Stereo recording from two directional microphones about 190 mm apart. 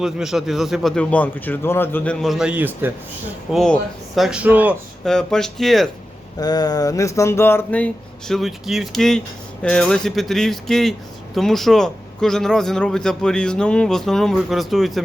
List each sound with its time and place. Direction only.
0.0 s a man's voice: centre (ahead or behind)
3.5 s a man's voice: centre (ahead or behind)
5.0 s a man's voice: 5° left (ahead or behind)
6.4 s a sound: 20° left (ahead or behind)
8.3 s a man's voice: centre (ahead or behind)